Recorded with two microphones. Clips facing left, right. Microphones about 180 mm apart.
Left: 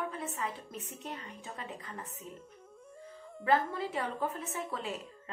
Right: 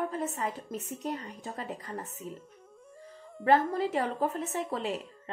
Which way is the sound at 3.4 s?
35° right (ahead or behind).